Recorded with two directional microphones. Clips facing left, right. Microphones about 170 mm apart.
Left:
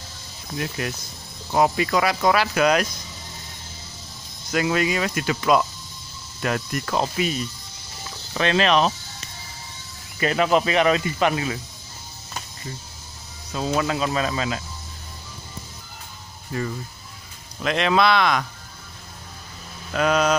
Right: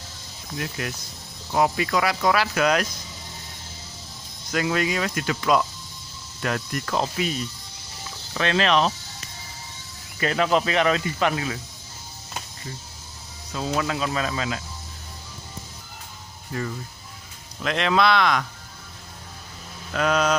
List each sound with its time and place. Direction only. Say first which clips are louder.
0.6 s speech: left 3 dB; 25° left (ahead or behind)
4.5 s speech: left 2 dB; 10° left (ahead or behind)
8.4 s speech: left 2 dB; 20° left (ahead or behind)
10.2 s speech: left 2 dB; 10° left (ahead or behind)
13.5 s speech: left 2 dB; 25° left (ahead or behind)
17.6 s speech: left 1 dB; 15° left (ahead or behind)
19.9 s speech: left 2 dB; 15° left (ahead or behind)